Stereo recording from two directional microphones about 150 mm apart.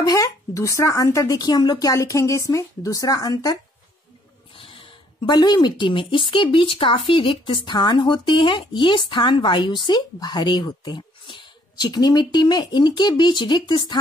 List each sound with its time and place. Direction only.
0.0 s speech: 25° left (ahead or behind)
4.6 s a woman's voice: 35° left (ahead or behind)